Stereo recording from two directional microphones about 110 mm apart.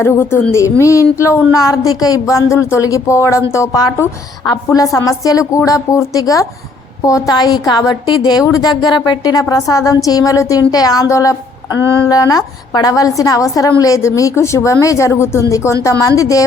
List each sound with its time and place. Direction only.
0.0 s a woman's voice: 20° left (ahead or behind); by 8.4 s 40° left (ahead or behind)
8.7 s speech: 5° right (ahead or behind)
9.0 s a woman's voice: 35° left (ahead or behind)